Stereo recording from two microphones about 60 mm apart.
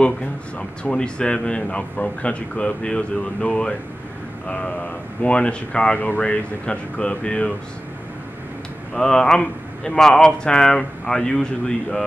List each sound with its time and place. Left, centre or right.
0.6 s speech: centre
5.9 s speech: left
8.9 s speech: centre